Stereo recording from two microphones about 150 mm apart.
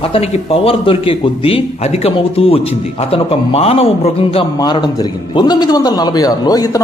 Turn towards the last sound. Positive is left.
turn(degrees=25)  # may be behind; listen again after turning